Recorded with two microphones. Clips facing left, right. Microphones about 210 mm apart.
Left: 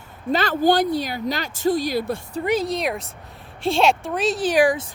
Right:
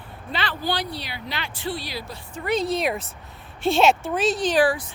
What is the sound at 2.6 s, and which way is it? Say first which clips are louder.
Speech: even; centre (ahead or behind).